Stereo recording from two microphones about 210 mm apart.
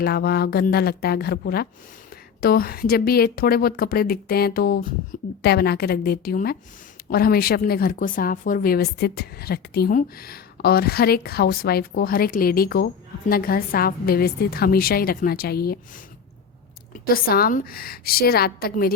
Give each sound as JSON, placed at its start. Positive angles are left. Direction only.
{"t": 0.0, "sound": "a woman's voice", "side_deg": 50}
{"t": 17.1, "sound": "a woman's voice", "side_deg": 45}